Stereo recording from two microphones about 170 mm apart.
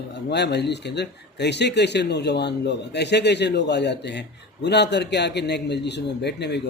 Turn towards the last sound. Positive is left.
turn(degrees=80)